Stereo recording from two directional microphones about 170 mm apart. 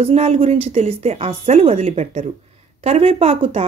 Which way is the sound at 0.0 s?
35° right (ahead or behind).